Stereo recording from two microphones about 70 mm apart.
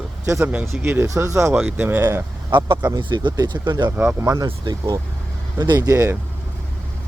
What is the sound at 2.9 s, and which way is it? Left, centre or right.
Speech, right.